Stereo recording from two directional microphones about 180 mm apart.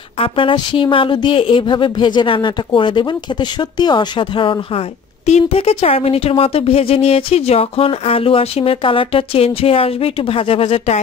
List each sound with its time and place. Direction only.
0.2 s speech: 30° left (ahead or behind)